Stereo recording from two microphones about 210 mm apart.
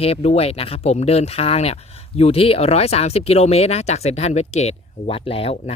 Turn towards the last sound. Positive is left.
turn(degrees=25)  # may be behind; listen again after turning